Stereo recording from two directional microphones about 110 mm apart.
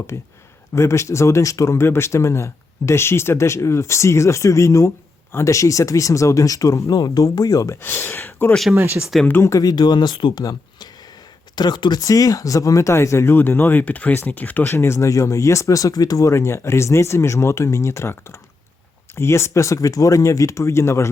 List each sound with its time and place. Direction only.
0.7 s speech: 25° left (ahead or behind)
8.7 s speech: 25° right (ahead or behind)
9.2 s speech: 20° left (ahead or behind); by 10.4 s 45° left (ahead or behind)
11.5 s speech: 40° left (ahead or behind); by 21.1 s 25° left (ahead or behind)